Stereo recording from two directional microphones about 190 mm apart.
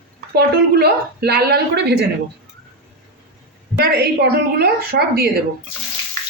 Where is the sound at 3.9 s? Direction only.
60° right (ahead or behind).